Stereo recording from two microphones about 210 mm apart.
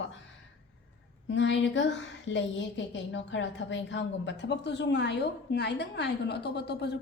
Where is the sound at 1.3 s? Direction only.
60° left (ahead or behind).